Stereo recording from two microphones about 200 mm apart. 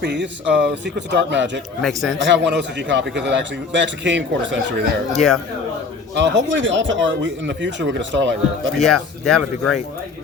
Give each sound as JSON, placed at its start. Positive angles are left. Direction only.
{"t": 0.0, "sound": "a man's voice", "side_deg": -60}
{"t": 1.8, "sound": "speech", "side_deg": 0}
{"t": 2.2, "sound": "a man's voice", "side_deg": -65}
{"t": 5.1, "sound": "speech", "side_deg": 0}
{"t": 6.1, "sound": "a man's voice", "side_deg": -65}
{"t": 8.8, "sound": "speech", "side_deg": 0}